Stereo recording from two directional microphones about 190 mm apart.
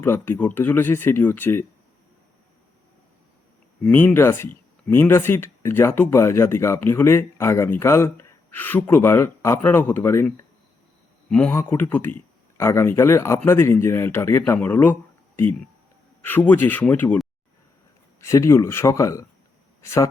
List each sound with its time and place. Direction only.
0.0 s speech: 10° left (ahead or behind)
3.8 s speech: 10° left (ahead or behind)
16.2 s speech: 10° left (ahead or behind)